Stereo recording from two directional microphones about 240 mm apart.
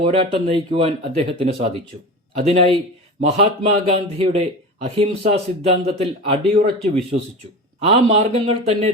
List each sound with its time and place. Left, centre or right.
0.0 s speech: right